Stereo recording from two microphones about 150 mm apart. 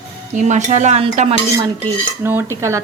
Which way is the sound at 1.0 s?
40° right (ahead or behind).